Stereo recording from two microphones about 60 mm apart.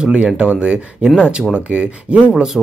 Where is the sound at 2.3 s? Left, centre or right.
Centre.